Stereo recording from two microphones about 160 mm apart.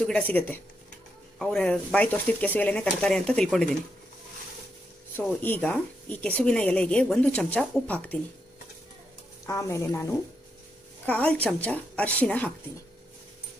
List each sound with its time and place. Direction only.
0.0 s a woman's voice: 10° left (ahead or behind)
5.1 s a woman's voice: 10° left (ahead or behind)
9.5 s speech: 20° left (ahead or behind)
11.1 s a woman's voice: 10° left (ahead or behind)